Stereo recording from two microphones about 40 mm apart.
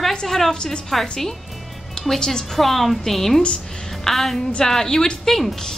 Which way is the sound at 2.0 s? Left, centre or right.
Centre.